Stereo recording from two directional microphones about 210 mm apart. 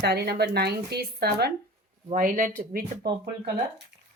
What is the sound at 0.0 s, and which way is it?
Speech, 50° right (ahead or behind).